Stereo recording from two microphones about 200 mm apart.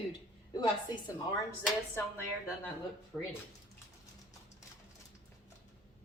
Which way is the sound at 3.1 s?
5° left (ahead or behind).